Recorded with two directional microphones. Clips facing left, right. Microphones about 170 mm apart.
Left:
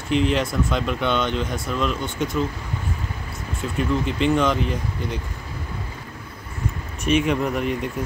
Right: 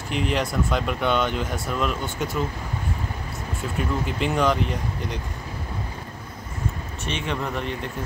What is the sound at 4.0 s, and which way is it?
Speech, centre (ahead or behind).